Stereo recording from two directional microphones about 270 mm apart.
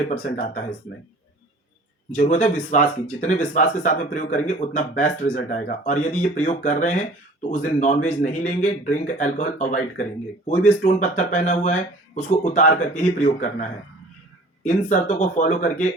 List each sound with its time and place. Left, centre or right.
0.1 s speech: left
2.1 s speech: left